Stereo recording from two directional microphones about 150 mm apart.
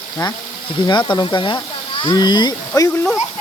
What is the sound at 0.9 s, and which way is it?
Speech, 30° left (ahead or behind).